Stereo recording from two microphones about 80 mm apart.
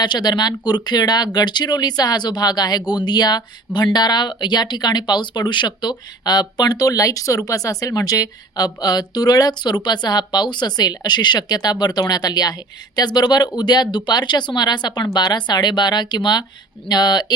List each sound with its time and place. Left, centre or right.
0.0 s speech: left